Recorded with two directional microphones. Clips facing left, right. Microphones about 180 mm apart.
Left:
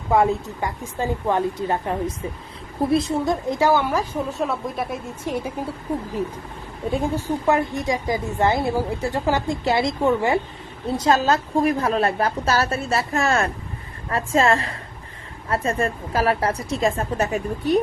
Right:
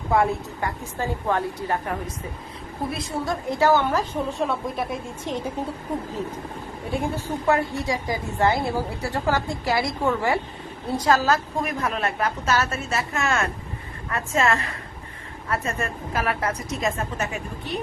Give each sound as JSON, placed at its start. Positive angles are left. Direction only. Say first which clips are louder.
{"t": 0.1, "sound": "a woman's voice", "louder": "left 3 dB", "side_deg": 15}
{"t": 7.1, "sound": "a woman's voice", "louder": "left 1 dB", "side_deg": 15}